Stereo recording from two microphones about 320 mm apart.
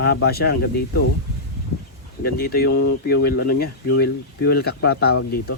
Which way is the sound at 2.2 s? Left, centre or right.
Left.